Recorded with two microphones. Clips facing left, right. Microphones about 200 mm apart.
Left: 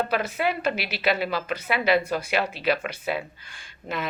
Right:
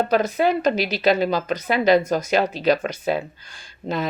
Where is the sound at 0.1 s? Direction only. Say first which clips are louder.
Right 7 dB; 40° right (ahead or behind).